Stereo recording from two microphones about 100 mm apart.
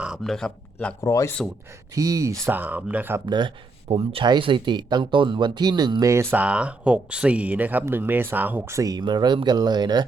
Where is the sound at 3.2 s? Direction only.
50° right (ahead or behind).